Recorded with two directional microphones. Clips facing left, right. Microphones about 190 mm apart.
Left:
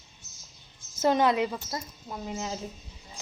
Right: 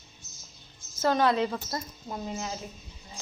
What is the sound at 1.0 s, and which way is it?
Speech, 20° left (ahead or behind).